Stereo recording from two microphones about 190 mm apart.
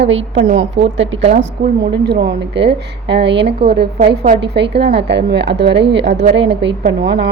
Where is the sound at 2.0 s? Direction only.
60° right (ahead or behind).